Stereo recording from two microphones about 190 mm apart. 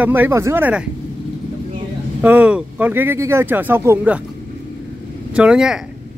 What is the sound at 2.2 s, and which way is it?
Speech, 10° right (ahead or behind).